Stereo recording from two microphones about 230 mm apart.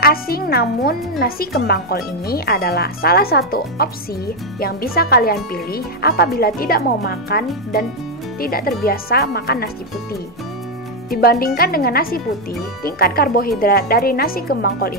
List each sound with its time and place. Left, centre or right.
0.0 s speech: left
11.1 s speech: left